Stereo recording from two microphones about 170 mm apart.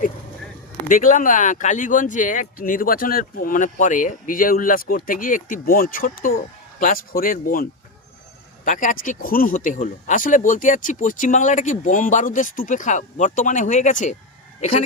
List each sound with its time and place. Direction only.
0.9 s speech: 50° left (ahead or behind)